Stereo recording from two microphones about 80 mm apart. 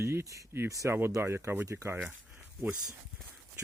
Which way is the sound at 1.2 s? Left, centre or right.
Right.